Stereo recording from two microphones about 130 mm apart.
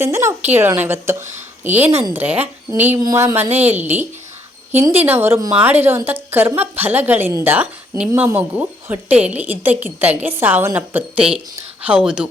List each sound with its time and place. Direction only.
0.0 s a woman's voice: 20° right (ahead or behind)
3.0 s a woman's voice: 25° right (ahead or behind)
3.3 s a woman's voice: 15° right (ahead or behind)